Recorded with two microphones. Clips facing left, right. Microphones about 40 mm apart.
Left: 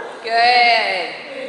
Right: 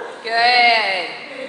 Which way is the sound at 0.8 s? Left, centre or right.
Centre.